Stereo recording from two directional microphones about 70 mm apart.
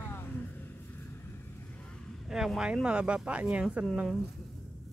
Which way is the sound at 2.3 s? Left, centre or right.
Centre.